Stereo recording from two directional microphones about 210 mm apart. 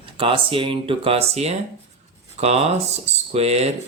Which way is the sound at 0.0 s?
25° right (ahead or behind).